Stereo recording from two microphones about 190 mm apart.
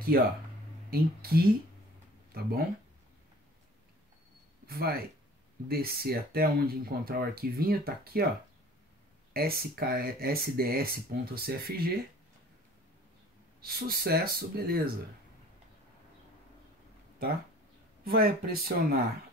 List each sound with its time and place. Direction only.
0.1 s speech: 55° right (ahead or behind)
4.6 s speech: 55° right (ahead or behind)
9.3 s speech: 55° right (ahead or behind)
13.6 s speech: 55° right (ahead or behind)
18.0 s speech: 55° right (ahead or behind)